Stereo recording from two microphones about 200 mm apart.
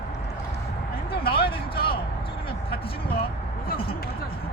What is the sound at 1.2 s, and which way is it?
Speech, 50° left (ahead or behind).